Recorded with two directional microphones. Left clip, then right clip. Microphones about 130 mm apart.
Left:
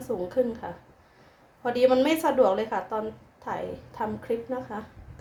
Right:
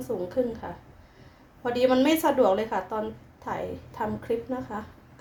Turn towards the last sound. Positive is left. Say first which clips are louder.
# even
turn(degrees=0)  # may be behind; listen again after turning